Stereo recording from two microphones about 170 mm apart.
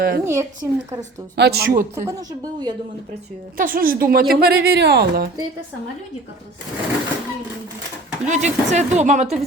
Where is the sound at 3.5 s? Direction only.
55° right (ahead or behind).